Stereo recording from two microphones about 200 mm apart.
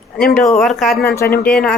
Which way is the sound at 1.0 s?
15° left (ahead or behind).